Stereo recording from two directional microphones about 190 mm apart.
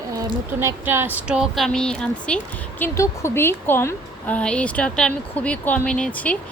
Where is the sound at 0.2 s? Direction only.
15° right (ahead or behind).